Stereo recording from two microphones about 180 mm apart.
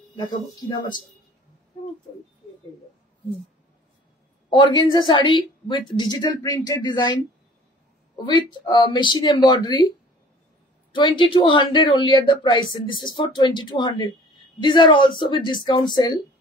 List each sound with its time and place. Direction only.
0.1 s a woman's voice: 25° left (ahead or behind)
4.5 s a woman's voice: 25° left (ahead or behind)
8.3 s a woman's voice: 25° left (ahead or behind)